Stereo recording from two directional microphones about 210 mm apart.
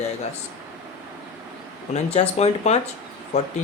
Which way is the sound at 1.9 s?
30° left (ahead or behind).